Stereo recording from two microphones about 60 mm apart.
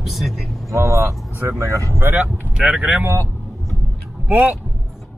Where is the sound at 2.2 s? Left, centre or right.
Centre.